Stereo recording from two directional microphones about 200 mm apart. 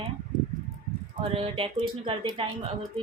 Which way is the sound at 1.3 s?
25° right (ahead or behind).